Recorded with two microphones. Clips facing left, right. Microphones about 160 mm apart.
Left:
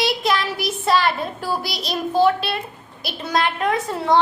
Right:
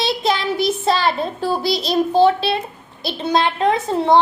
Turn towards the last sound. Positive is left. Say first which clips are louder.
# right 4 dB
turn(degrees=-25)  # may be behind; listen again after turning